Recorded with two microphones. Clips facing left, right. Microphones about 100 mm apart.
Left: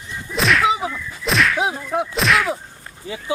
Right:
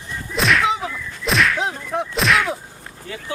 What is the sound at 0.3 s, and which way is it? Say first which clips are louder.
Whip: left 1 dB; centre (ahead or behind).